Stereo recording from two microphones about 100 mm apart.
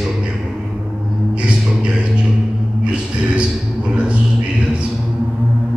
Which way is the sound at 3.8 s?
10° right (ahead or behind).